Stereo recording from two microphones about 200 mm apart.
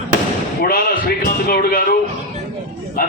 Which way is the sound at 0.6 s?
50° left (ahead or behind).